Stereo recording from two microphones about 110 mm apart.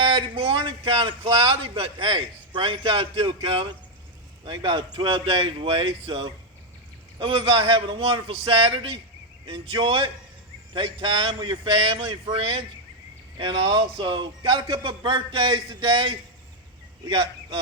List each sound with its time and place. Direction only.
0.0 s speech: 50° right (ahead or behind)